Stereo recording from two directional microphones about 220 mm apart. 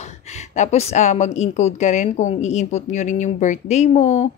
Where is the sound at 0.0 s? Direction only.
30° left (ahead or behind).